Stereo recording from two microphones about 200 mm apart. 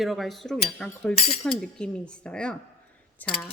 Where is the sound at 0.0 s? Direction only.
Centre (ahead or behind).